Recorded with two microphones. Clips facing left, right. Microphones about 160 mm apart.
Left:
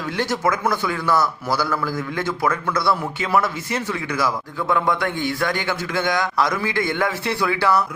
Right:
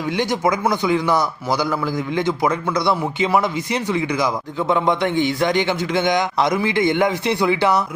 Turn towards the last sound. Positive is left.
turn(degrees=-20)  # may be behind; listen again after turning